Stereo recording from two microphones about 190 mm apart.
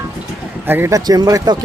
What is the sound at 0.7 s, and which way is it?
Speech, 10° right (ahead or behind).